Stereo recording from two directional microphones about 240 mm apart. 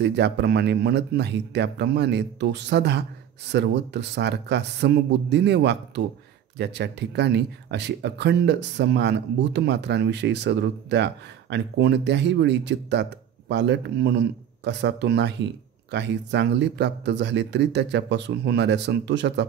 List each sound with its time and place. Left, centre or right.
0.0 s speech: right